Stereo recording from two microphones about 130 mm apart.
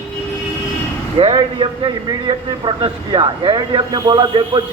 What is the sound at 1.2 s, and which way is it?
A man's voice, 40° right (ahead or behind).